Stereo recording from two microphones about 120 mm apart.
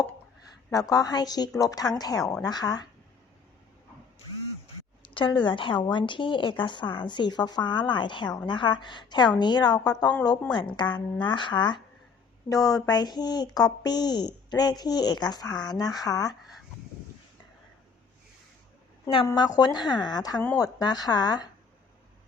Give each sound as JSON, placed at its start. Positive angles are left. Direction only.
{"t": 0.7, "sound": "a woman's voice", "side_deg": 30}
{"t": 5.1, "sound": "a woman's voice", "side_deg": 40}
{"t": 19.3, "sound": "a woman's voice", "side_deg": 35}